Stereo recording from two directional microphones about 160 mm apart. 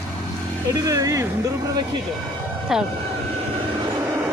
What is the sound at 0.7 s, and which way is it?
Speech, 20° right (ahead or behind).